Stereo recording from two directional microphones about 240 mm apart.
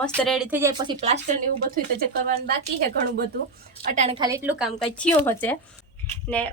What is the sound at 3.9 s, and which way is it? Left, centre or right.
Speech, right.